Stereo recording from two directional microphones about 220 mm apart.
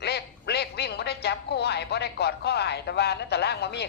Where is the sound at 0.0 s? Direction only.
50° left (ahead or behind).